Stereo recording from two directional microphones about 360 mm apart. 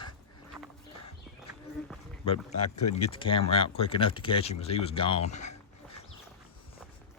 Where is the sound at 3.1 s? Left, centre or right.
Centre.